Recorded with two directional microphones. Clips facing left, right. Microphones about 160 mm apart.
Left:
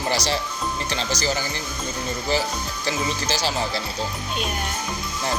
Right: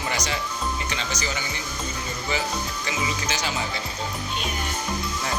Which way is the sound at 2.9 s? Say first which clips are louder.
Left 4 dB; 35° left (ahead or behind).